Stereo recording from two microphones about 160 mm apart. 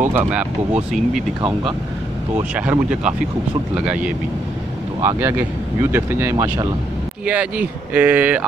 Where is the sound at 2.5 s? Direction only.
10° right (ahead or behind).